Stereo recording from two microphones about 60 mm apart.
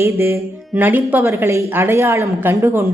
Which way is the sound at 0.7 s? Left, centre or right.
Right.